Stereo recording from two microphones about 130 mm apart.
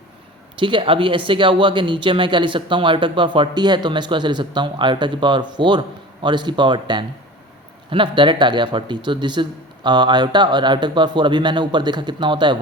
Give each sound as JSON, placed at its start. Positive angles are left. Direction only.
{"t": 0.5, "sound": "speech", "side_deg": -40}